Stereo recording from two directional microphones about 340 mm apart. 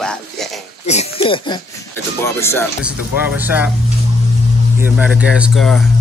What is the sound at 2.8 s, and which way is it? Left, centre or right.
Speech, centre.